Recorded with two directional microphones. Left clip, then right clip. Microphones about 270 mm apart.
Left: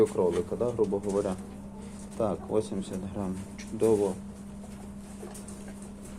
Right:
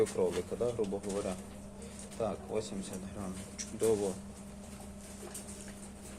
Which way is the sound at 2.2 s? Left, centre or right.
Left.